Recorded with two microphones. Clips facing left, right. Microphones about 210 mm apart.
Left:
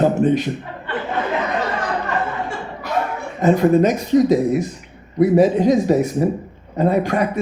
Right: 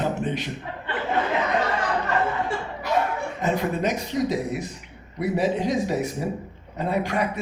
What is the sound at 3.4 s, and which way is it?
Speech, 45° left (ahead or behind).